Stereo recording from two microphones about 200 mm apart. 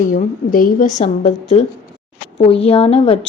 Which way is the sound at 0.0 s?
40° left (ahead or behind).